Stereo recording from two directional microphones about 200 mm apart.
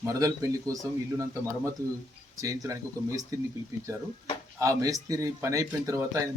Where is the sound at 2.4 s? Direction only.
15° right (ahead or behind).